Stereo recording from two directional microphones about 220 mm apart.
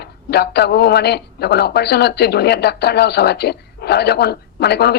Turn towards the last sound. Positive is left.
turn(degrees=50)  # may be behind; listen again after turning